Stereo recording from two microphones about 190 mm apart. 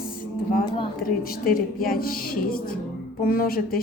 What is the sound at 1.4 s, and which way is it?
Speech, 50° left (ahead or behind).